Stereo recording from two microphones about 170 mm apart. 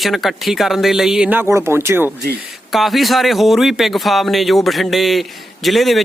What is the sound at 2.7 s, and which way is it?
A man's voice, centre (ahead or behind).